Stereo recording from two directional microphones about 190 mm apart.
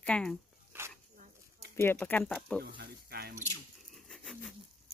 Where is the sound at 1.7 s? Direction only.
10° left (ahead or behind).